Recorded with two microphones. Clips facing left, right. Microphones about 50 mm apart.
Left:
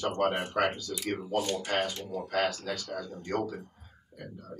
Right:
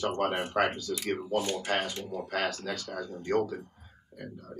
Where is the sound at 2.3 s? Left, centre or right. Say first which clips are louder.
Left 2 dB; right.